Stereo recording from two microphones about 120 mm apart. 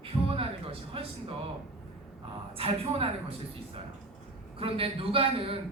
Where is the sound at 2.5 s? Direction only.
50° right (ahead or behind).